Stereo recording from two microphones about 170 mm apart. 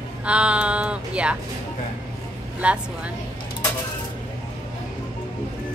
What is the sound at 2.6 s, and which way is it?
Speech, 5° right (ahead or behind).